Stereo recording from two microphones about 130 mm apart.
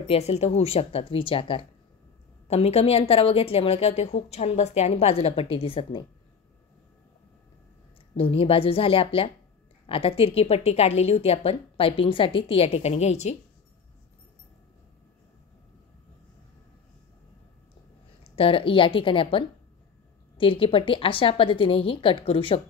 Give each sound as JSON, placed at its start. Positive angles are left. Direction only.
{"t": 0.1, "sound": "a woman's voice", "side_deg": 55}
{"t": 8.2, "sound": "a woman's voice", "side_deg": 45}
{"t": 18.3, "sound": "a woman's voice", "side_deg": 45}